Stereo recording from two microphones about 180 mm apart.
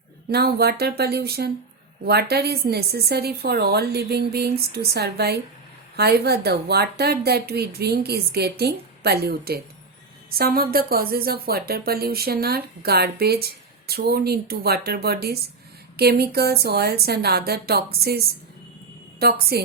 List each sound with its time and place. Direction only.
0.3 s speech: 60° right (ahead or behind)
19.2 s speech: 60° right (ahead or behind)